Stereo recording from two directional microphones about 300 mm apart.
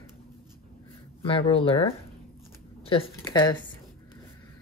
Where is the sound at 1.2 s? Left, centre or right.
Centre.